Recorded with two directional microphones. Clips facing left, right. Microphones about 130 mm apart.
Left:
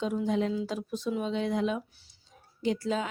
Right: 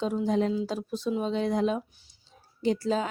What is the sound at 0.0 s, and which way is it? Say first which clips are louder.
A woman's voice: right 2 dB; 35° right (ahead or behind).